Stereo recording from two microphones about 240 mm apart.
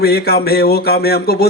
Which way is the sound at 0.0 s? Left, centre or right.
Left.